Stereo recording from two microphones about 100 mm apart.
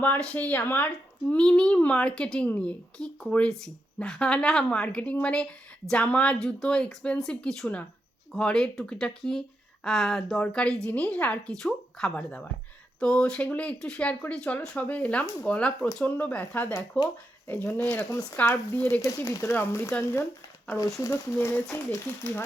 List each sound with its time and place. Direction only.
0.0 s speech: 10° left (ahead or behind)
19.0 s speech: 35° left (ahead or behind); by 22.4 s 20° left (ahead or behind)